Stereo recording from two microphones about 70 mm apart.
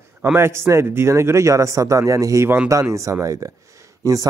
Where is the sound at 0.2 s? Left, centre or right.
Right.